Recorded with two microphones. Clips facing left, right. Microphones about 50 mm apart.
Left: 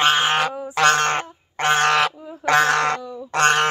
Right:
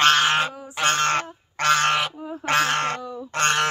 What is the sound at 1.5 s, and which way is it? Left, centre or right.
Goose, left.